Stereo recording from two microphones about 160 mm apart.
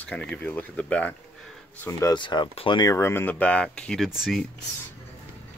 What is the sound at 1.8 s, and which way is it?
Speech, 20° left (ahead or behind).